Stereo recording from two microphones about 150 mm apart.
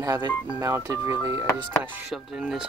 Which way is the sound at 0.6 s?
20° right (ahead or behind).